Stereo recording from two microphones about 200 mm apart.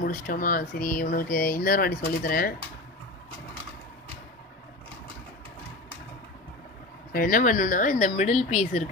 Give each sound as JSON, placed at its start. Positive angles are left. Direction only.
{"t": 0.0, "sound": "speech", "side_deg": 45}
{"t": 7.1, "sound": "speech", "side_deg": 45}